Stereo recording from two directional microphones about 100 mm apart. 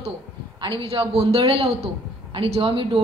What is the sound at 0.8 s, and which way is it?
A woman's voice, 75° right (ahead or behind).